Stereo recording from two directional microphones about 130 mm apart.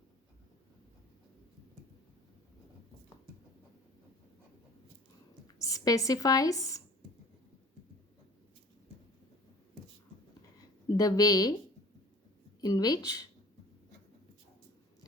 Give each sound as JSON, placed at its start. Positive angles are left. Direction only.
{"t": 5.5, "sound": "speech", "side_deg": 25}
{"t": 10.9, "sound": "speech", "side_deg": 30}
{"t": 12.6, "sound": "speech", "side_deg": 30}